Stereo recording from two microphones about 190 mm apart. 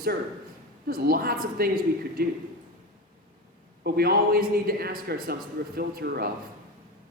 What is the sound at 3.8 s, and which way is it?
Speech, 55° right (ahead or behind).